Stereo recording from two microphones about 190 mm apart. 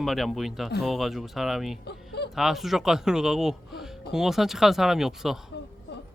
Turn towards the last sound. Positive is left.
turn(degrees=0)  # may be behind; listen again after turning